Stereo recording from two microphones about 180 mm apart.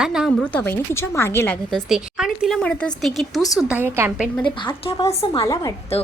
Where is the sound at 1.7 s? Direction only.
Centre (ahead or behind).